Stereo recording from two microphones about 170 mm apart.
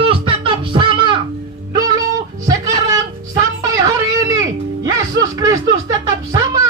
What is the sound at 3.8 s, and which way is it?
Music, 20° right (ahead or behind).